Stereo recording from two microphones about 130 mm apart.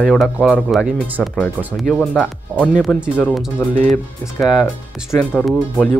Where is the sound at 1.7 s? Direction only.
Centre (ahead or behind).